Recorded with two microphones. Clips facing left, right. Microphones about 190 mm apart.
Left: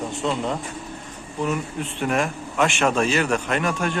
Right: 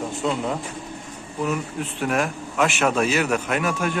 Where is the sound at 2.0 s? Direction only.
Centre (ahead or behind).